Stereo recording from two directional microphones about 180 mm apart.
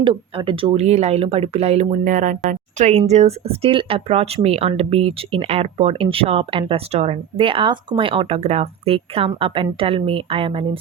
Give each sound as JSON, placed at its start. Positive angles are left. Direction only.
{"t": 0.0, "sound": "speech", "side_deg": -30}